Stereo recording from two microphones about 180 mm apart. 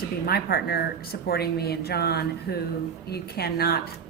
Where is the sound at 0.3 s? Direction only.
60° left (ahead or behind).